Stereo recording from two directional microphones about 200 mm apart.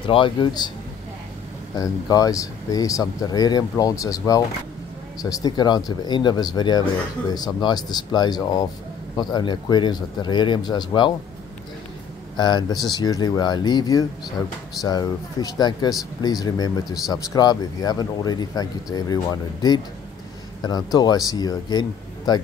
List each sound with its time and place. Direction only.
0.0 s speech: 25° left (ahead or behind)
1.8 s speech: 20° left (ahead or behind)
12.4 s speech: 20° left (ahead or behind)
20.6 s speech: 20° left (ahead or behind)